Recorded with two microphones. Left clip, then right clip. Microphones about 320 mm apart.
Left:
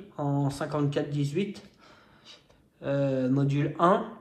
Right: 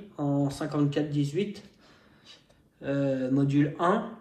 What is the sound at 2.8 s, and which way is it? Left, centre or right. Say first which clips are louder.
Speech: left 1 dB; left.